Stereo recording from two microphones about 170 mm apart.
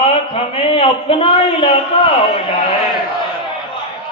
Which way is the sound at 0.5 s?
35° left (ahead or behind).